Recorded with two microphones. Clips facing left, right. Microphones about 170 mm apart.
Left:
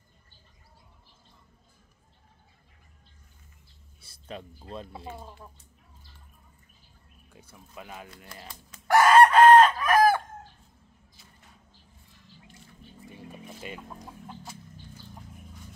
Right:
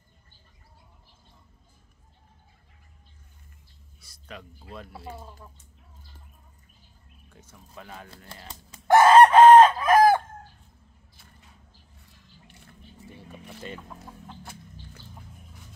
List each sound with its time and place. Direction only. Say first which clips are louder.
4.0 s speech: left 3 dB; 30° left (ahead or behind)
7.3 s speech: left 1 dB; 10° left (ahead or behind)
8.5 s chicken: right 5 dB; 25° right (ahead or behind)
13.1 s a sound: left 1 dB; 10° left (ahead or behind)